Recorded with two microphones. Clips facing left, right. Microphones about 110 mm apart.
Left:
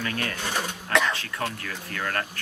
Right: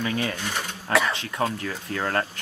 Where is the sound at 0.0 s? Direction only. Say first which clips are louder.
Right 3 dB; 15° right (ahead or behind).